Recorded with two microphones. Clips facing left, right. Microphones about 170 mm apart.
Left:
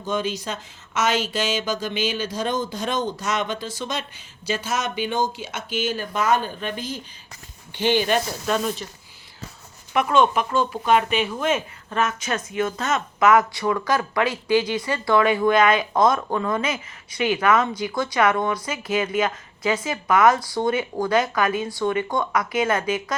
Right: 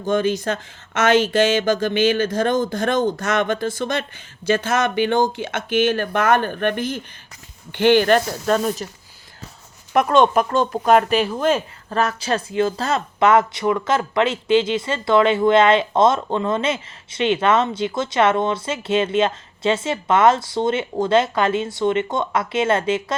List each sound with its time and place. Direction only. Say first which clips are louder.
0.0 s speech: right 6 dB; 50° right (ahead or behind)
8.6 s speech: right 4 dB; 40° right (ahead or behind)
9.9 s speech: right 4 dB; 40° right (ahead or behind)